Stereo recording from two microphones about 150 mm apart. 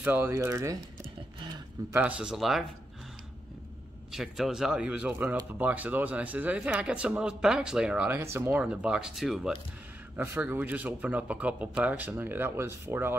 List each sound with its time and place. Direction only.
0.0 s speech: 15° right (ahead or behind)
1.9 s speech: 15° right (ahead or behind)
4.1 s speech: centre (ahead or behind)
10.1 s speech: 10° right (ahead or behind)